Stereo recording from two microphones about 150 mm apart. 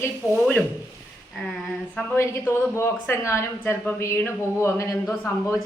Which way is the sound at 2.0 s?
20° left (ahead or behind).